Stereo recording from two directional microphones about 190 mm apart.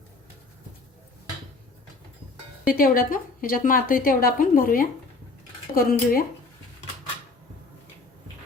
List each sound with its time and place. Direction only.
2.6 s a woman's voice: 50° left (ahead or behind)